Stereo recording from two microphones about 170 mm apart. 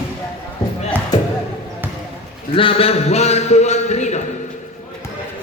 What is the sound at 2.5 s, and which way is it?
A man's voice, 30° left (ahead or behind).